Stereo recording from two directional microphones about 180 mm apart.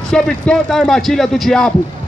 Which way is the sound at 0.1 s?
5° left (ahead or behind).